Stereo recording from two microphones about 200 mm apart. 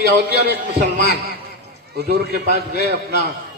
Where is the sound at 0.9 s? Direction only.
55° left (ahead or behind).